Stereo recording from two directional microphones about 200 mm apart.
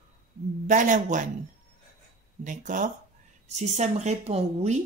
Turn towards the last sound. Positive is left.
turn(degrees=-35)  # may be behind; listen again after turning